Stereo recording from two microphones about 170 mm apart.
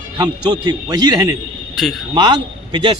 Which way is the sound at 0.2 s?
25° right (ahead or behind).